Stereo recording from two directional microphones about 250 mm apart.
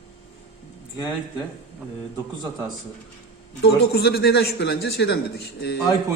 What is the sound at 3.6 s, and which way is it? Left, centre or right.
A man's voice, left.